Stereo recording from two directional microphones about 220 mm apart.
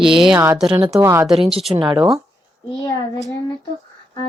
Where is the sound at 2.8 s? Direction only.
15° left (ahead or behind).